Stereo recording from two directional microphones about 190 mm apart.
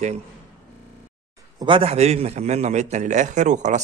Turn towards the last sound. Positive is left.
turn(degrees=-40)  # may be behind; listen again after turning